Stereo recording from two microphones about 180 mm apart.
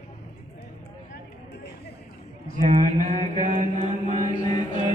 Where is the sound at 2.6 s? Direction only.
45° right (ahead or behind).